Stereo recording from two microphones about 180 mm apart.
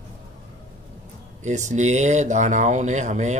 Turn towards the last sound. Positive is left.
turn(degrees=-40)  # may be behind; listen again after turning